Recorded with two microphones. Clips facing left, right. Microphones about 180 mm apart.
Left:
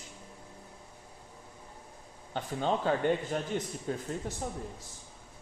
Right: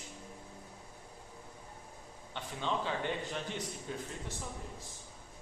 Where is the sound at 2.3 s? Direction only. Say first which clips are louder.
Left 6 dB; 45° left (ahead or behind).